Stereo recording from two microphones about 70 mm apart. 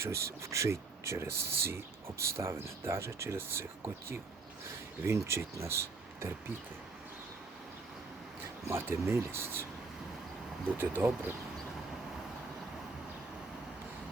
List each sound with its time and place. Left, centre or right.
0.0 s speech: right
8.6 s speech: right
10.8 s speech: right